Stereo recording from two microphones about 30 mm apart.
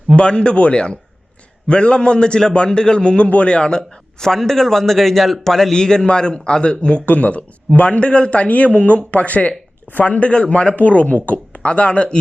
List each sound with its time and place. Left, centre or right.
0.2 s speech: left
3.5 s a man's voice: left
7.0 s speech: left
7.8 s speech: left
9.1 s speech: left
10.0 s speech: left
10.8 s speech: left